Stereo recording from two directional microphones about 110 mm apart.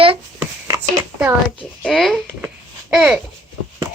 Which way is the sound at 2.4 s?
10° right (ahead or behind).